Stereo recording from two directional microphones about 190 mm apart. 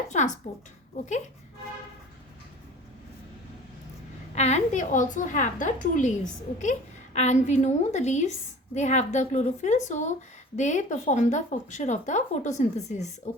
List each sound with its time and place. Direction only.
0.1 s a woman's voice: 40° left (ahead or behind)
4.4 s a woman's voice: 35° left (ahead or behind)